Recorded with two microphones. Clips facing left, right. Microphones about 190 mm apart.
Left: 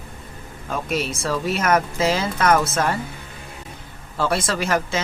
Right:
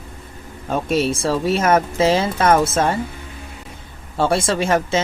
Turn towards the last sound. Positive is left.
turn(degrees=-25)  # may be behind; listen again after turning